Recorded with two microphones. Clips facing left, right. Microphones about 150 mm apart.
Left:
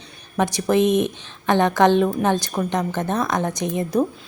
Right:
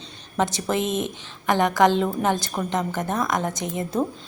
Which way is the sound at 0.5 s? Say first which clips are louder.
Left 7 dB; 20° left (ahead or behind).